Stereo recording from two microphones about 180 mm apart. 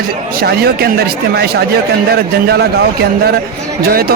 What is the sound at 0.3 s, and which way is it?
A man's voice, 60° right (ahead or behind).